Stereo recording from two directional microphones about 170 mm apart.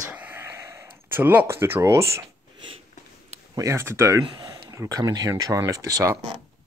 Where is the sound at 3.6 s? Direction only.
15° right (ahead or behind).